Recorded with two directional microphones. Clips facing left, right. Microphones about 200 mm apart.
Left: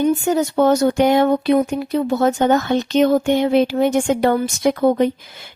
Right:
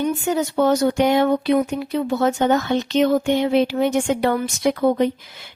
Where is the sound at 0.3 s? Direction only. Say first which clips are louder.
Even; 45° left (ahead or behind).